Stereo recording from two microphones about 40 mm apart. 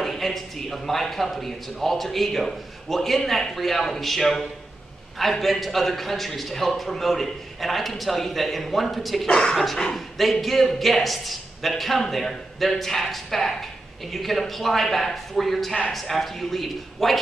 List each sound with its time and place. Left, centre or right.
0.0 s a man's voice: centre
9.3 s speech: centre
9.9 s a man's voice: centre